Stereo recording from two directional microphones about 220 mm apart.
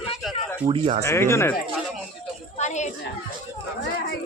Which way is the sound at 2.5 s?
30° left (ahead or behind).